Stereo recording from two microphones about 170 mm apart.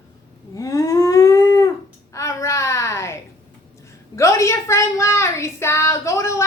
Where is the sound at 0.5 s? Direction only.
20° left (ahead or behind).